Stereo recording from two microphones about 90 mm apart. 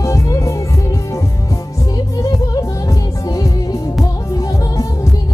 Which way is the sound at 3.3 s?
40° left (ahead or behind).